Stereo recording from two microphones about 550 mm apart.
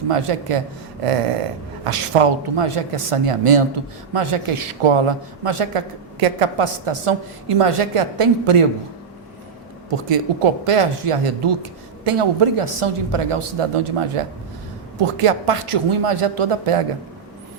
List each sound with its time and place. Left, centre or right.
0.1 s a woman's voice: right
9.9 s a woman's voice: right